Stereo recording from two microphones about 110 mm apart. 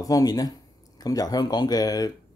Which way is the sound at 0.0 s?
35° left (ahead or behind).